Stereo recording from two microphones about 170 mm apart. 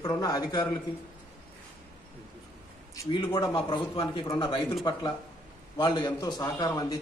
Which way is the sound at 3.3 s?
25° left (ahead or behind).